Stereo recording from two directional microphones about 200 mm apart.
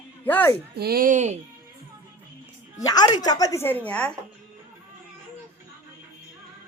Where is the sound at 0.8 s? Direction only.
50° right (ahead or behind).